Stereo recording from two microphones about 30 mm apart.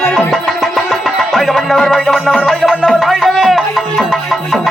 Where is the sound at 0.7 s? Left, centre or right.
Centre.